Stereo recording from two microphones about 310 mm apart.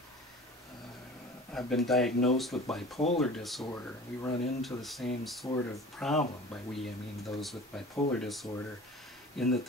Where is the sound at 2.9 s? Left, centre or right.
Centre.